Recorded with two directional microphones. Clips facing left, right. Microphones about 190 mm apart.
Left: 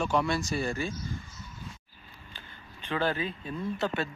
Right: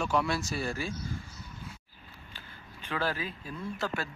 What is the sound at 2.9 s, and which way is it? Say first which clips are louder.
Speech: left 3 dB; centre (ahead or behind).